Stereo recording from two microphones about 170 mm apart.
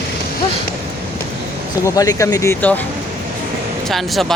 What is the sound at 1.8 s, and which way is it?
Speech, 20° left (ahead or behind).